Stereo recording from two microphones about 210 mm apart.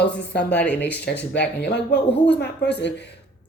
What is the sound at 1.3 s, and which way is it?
Speech, 55° left (ahead or behind).